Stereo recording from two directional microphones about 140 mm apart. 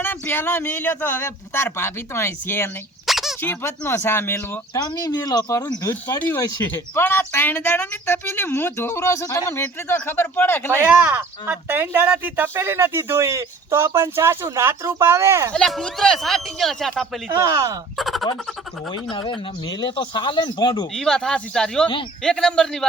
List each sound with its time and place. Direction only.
0.0 s speech: 15° left (ahead or behind)
3.1 s squeak: centre (ahead or behind)
3.4 s speech: 15° left (ahead or behind)
6.1 s speech: 15° left (ahead or behind)
6.4 s speech: 25° left (ahead or behind)
10.7 s speech: 15° right (ahead or behind)
15.5 s speech: 5° left (ahead or behind)
17.3 s speech: 25° right (ahead or behind)
17.9 s speech: centre (ahead or behind)
19.1 s speech: 35° left (ahead or behind)
20.9 s speech: 5° left (ahead or behind)